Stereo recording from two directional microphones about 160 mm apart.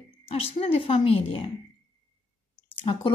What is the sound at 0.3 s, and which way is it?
A woman's voice, 40° left (ahead or behind).